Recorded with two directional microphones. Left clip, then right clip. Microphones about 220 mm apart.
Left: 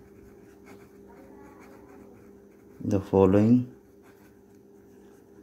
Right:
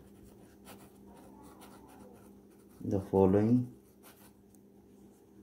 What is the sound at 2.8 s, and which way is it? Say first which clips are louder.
Speech: left 6 dB; 35° left (ahead or behind).